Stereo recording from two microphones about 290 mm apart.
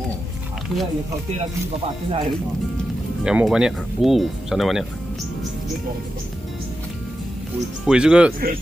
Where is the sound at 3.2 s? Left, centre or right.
Centre.